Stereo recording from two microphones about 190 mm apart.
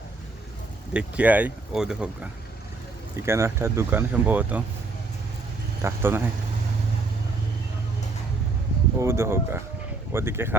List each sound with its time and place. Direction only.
0.9 s speech: 5° right (ahead or behind)
3.2 s speech: 15° right (ahead or behind)
5.8 s speech: 10° right (ahead or behind)
9.0 s speech: 15° right (ahead or behind)